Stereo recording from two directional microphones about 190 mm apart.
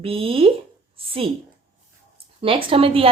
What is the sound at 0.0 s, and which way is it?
A woman's voice, 30° right (ahead or behind).